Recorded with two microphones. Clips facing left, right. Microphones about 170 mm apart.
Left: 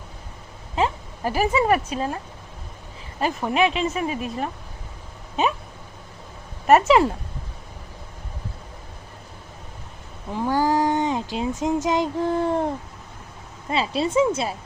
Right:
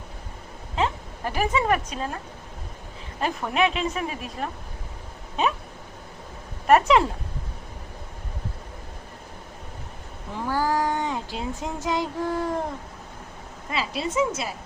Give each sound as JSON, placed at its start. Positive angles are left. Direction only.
{"t": 0.8, "sound": "speech", "side_deg": 5}
{"t": 3.2, "sound": "speech", "side_deg": 5}
{"t": 6.7, "sound": "speech", "side_deg": 5}
{"t": 10.4, "sound": "speech", "side_deg": 20}
{"t": 13.7, "sound": "a woman's voice", "side_deg": 30}